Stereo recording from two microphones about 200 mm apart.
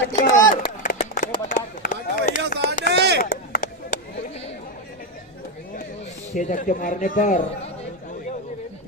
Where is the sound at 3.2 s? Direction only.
40° left (ahead or behind).